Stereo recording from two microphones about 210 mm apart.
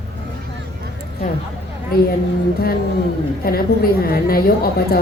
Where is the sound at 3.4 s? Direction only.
45° left (ahead or behind).